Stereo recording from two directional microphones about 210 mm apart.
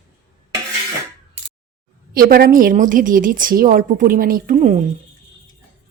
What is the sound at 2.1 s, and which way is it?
A woman's voice, 45° right (ahead or behind).